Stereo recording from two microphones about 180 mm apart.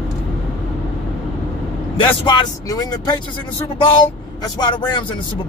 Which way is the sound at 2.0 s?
25° left (ahead or behind).